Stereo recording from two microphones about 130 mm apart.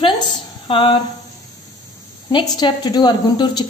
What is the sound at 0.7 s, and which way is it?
Speech, 40° left (ahead or behind).